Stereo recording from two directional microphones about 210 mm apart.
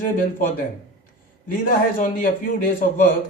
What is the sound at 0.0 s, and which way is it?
A man's voice, 40° left (ahead or behind).